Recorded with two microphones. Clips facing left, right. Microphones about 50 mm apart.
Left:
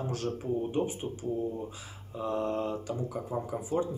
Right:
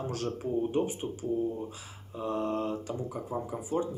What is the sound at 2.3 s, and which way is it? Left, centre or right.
Speech, centre.